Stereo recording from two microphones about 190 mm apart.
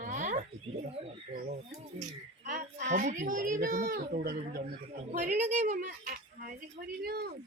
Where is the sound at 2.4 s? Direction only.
40° right (ahead or behind).